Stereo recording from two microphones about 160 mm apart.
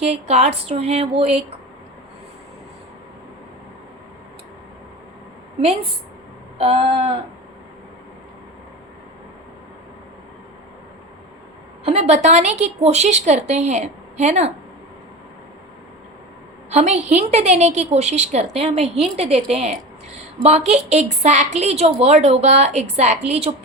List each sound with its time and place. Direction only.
0.0 s speech: 40° right (ahead or behind)
6.6 s speech: 40° right (ahead or behind)
11.9 s a woman's voice: 45° right (ahead or behind)
16.6 s a woman's voice: 45° right (ahead or behind)